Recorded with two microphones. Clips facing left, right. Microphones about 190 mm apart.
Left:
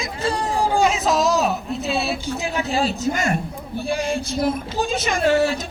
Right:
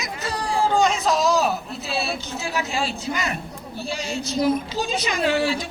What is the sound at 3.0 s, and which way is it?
Speech, 45° left (ahead or behind).